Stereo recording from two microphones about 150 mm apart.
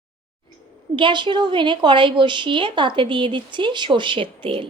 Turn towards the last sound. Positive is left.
turn(degrees=-35)  # may be behind; listen again after turning